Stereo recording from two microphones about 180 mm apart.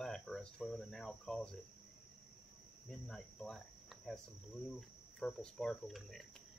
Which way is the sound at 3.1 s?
Centre (ahead or behind).